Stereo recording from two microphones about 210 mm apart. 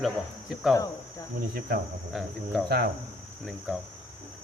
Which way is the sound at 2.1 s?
Centre (ahead or behind).